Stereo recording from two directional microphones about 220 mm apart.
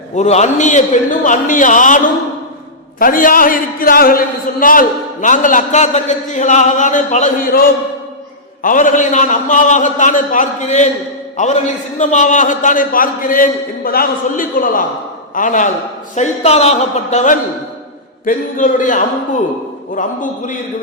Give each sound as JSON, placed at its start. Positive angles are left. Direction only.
{"t": 0.2, "sound": "a man's voice", "side_deg": 30}
{"t": 3.0, "sound": "a man's voice", "side_deg": 40}